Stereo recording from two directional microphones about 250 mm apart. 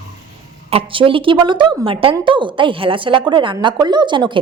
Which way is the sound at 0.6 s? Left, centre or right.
Right.